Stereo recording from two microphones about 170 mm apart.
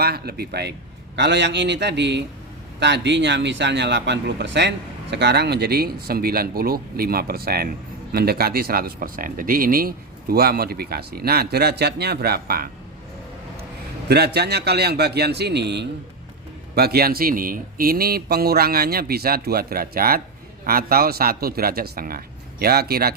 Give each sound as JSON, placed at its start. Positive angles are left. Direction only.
{"t": 0.0, "sound": "a man's voice", "side_deg": -70}
{"t": 1.1, "sound": "speech", "side_deg": -90}
{"t": 5.1, "sound": "speech", "side_deg": -80}
{"t": 14.1, "sound": "a man's voice", "side_deg": -75}
{"t": 16.7, "sound": "speech", "side_deg": -65}